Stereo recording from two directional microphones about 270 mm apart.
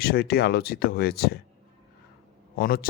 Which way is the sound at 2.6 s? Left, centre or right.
Left.